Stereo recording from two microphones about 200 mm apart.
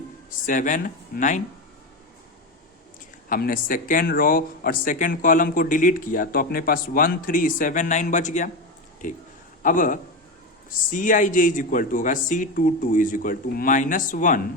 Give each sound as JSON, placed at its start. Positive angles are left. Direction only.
{"t": 0.3, "sound": "speech", "side_deg": 40}
{"t": 3.2, "sound": "speech", "side_deg": 45}